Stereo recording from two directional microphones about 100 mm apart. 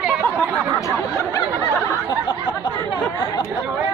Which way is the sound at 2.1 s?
50° left (ahead or behind).